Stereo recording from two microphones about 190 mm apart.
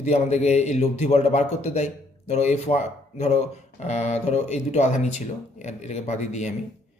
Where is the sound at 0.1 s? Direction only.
35° left (ahead or behind).